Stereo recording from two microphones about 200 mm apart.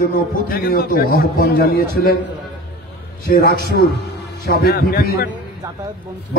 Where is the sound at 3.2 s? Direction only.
50° left (ahead or behind).